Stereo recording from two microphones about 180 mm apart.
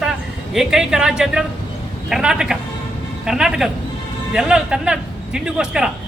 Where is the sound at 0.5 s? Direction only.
5° right (ahead or behind).